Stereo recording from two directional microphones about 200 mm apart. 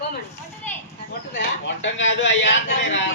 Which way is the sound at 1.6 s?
65° left (ahead or behind).